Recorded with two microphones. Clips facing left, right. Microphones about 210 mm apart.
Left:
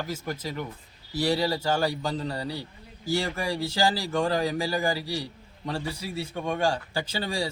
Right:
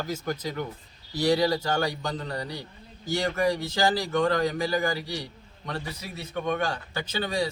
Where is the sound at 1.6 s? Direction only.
30° left (ahead or behind).